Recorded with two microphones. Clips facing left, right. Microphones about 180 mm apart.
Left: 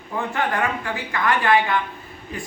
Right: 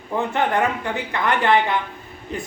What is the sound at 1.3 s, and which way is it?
Speech, 20° right (ahead or behind).